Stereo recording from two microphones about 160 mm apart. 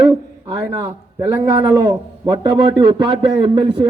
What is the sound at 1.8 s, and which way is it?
A man's voice, 25° right (ahead or behind).